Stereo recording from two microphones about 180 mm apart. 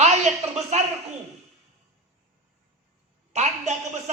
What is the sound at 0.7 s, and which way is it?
Speech, 40° right (ahead or behind).